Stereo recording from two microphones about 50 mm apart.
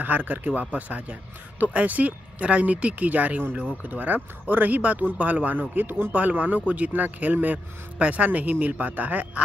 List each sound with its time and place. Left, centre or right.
0.0 s a man's voice: right